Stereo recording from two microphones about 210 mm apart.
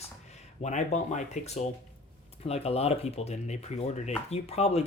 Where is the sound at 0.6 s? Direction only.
35° left (ahead or behind).